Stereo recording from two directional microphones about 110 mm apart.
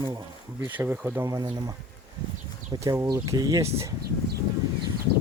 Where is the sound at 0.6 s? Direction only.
20° right (ahead or behind).